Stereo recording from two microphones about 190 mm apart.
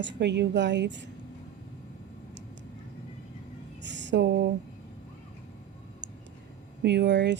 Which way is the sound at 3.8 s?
70° right (ahead or behind).